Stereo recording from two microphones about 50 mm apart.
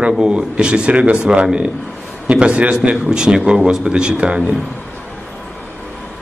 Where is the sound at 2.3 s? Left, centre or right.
Right.